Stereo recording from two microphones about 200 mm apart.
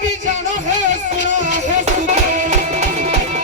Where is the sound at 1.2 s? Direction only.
40° right (ahead or behind).